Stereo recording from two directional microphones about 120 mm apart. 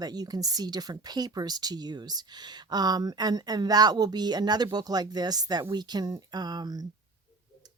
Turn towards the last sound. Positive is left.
turn(degrees=-35)  # may be behind; listen again after turning